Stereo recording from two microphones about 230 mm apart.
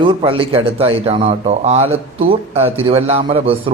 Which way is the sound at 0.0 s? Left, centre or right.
Right.